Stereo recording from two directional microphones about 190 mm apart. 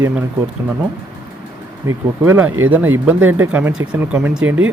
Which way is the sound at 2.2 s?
10° right (ahead or behind).